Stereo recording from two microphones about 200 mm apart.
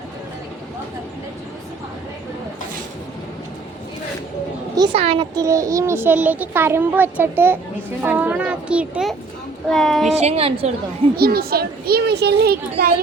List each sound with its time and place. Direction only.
4.8 s a child's voice: 25° right (ahead or behind); by 10.2 s centre (ahead or behind)
10.2 s a woman's voice: 30° right (ahead or behind)
11.2 s a child's voice: 50° right (ahead or behind)